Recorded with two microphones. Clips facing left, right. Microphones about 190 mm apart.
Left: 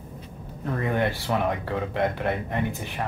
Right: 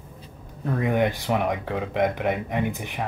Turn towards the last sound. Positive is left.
turn(degrees=-15)  # may be behind; listen again after turning